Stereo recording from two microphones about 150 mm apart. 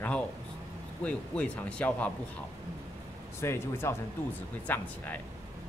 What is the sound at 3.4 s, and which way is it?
A woman's voice, 15° left (ahead or behind).